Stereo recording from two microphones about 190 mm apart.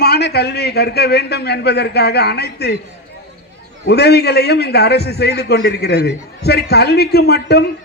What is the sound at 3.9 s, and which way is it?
A man's voice, 60° left (ahead or behind).